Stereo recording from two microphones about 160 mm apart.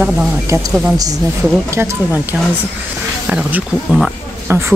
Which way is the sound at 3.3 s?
10° right (ahead or behind).